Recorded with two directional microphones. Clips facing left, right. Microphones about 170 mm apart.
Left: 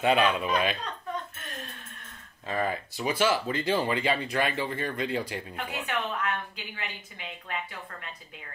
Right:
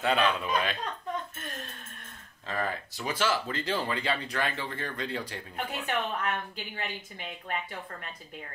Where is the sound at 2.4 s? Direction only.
15° left (ahead or behind).